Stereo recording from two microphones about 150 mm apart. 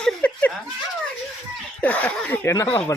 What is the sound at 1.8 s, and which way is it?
Speech, 10° left (ahead or behind).